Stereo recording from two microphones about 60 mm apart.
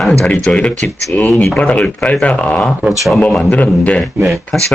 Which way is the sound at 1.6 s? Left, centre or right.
Left.